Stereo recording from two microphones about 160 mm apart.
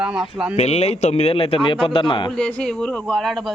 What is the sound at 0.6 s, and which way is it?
A man's voice, 45° left (ahead or behind).